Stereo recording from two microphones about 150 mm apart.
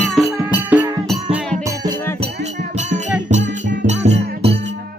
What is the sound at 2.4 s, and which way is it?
Music, 50° right (ahead or behind).